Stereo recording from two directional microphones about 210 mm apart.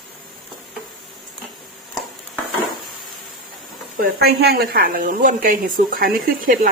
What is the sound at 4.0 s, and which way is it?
A woman's voice, 50° right (ahead or behind).